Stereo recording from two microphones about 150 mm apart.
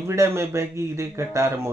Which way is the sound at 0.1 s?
20° right (ahead or behind).